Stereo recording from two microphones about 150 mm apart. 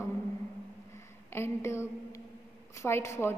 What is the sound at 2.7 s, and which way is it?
Speech, 20° left (ahead or behind).